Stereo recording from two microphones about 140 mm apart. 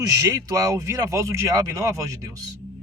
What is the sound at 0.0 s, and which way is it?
Speech, 20° right (ahead or behind).